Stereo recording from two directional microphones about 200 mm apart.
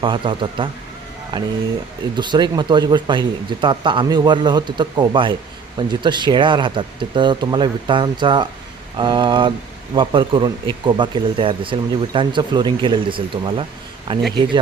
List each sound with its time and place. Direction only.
0.0 s speech: 25° right (ahead or behind)